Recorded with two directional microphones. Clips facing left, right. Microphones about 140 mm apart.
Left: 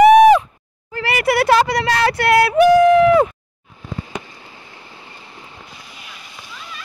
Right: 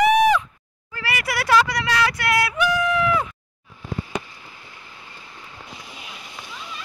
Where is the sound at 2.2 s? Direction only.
60° left (ahead or behind).